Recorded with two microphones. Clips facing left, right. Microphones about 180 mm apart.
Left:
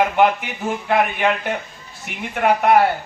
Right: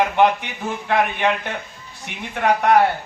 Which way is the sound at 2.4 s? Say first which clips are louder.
Left 1 dB; 10° left (ahead or behind).